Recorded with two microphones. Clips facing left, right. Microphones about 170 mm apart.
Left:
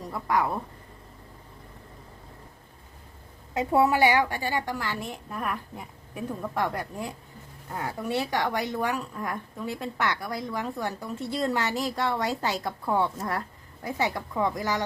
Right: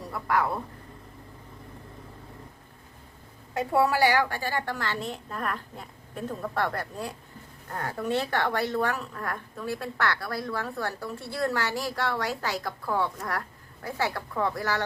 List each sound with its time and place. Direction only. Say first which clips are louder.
0.0 s speech: left 1 dB; 20° left (ahead or behind)
3.5 s a woman's voice: left 2 dB; 20° left (ahead or behind)